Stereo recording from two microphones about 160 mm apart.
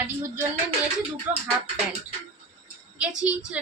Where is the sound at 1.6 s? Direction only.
40° right (ahead or behind).